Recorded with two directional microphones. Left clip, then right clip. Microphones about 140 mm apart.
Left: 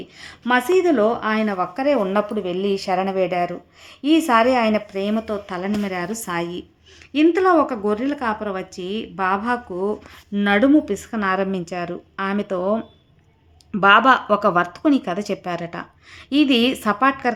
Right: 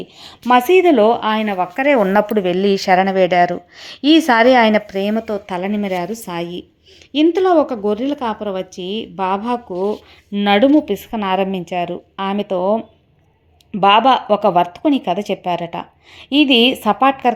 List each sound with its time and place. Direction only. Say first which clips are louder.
0.2 s speech: right 6 dB; 20° right (ahead or behind)
6.1 s speech: right 1 dB; 10° right (ahead or behind)
9.6 s speech: right 4 dB; 5° right (ahead or behind)
13.8 s a woman's voice: right 2 dB; 10° right (ahead or behind)
16.1 s a woman's voice: right 5 dB; 35° left (ahead or behind)
16.7 s speech: right 4 dB; 10° right (ahead or behind)